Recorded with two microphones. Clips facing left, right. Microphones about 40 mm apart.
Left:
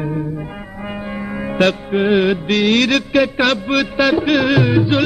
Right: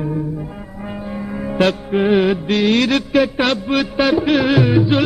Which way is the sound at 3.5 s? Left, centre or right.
Left.